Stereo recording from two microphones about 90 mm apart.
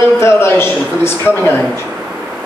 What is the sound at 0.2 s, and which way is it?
A man's voice, 30° left (ahead or behind).